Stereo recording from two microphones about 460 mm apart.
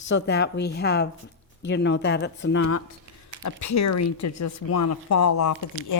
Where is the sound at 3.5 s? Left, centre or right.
Left.